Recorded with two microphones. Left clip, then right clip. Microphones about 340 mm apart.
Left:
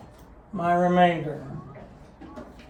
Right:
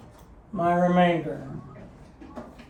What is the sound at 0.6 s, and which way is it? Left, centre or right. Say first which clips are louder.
Speech: left 1 dB; centre.